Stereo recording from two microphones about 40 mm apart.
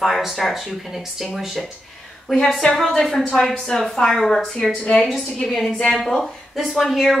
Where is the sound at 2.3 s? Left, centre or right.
Centre.